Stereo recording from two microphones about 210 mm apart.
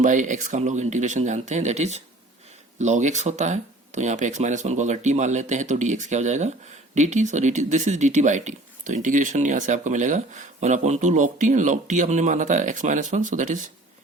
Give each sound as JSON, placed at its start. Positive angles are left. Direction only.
{"t": 0.0, "sound": "speech", "side_deg": -35}